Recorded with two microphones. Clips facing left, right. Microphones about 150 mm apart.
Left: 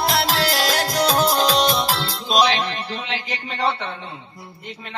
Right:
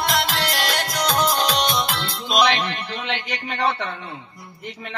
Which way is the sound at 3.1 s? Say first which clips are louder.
Even; 30° left (ahead or behind).